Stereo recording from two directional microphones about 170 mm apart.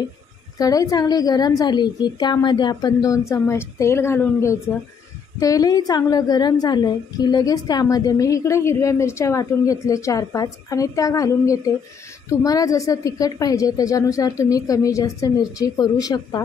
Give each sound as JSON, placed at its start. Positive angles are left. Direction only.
{"t": 0.6, "sound": "a woman's voice", "side_deg": 20}